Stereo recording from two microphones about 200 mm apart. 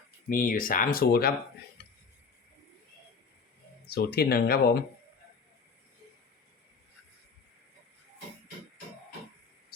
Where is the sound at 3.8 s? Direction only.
50° left (ahead or behind).